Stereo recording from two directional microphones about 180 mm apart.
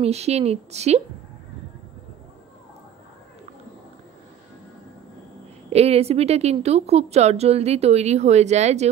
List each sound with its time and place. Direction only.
0.0 s a woman's voice: 35° right (ahead or behind)
5.7 s a woman's voice: 35° right (ahead or behind)